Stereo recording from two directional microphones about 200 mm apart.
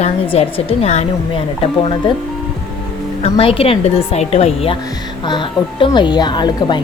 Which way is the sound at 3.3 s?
25° left (ahead or behind).